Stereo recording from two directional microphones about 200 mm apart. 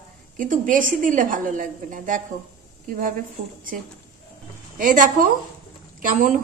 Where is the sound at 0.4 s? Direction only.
40° right (ahead or behind).